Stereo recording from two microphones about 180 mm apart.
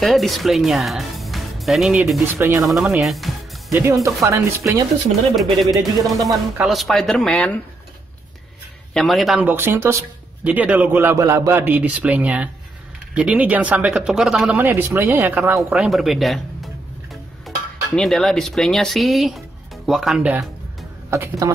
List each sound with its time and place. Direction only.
0.0 s speech: centre (ahead or behind)
2.3 s speech: 15° right (ahead or behind)
2.6 s speech: centre (ahead or behind)
3.7 s speech: 15° right (ahead or behind)
5.3 s speech: centre (ahead or behind)
8.9 s speech: centre (ahead or behind)
21.1 s speech: 15° right (ahead or behind)